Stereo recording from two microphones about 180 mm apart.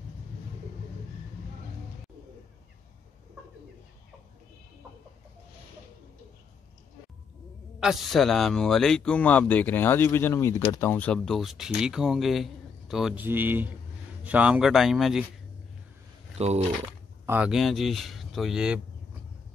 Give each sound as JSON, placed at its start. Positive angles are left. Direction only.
{"t": 7.8, "sound": "speech", "side_deg": 0}
{"t": 16.3, "sound": "speech", "side_deg": -35}
{"t": 17.3, "sound": "speech", "side_deg": -5}